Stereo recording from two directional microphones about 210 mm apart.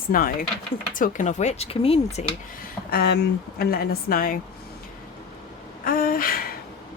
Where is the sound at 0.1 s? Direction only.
40° left (ahead or behind).